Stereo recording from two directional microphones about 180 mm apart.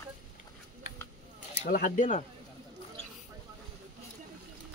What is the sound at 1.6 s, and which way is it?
Speech, 45° left (ahead or behind).